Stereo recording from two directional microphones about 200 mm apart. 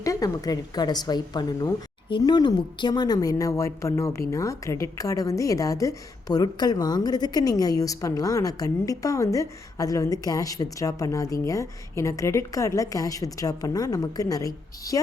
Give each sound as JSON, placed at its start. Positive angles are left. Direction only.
{"t": 0.0, "sound": "a woman's voice", "side_deg": 15}